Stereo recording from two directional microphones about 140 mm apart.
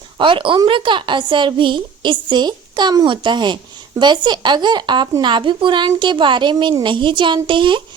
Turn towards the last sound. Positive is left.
turn(degrees=-35)  # may be behind; listen again after turning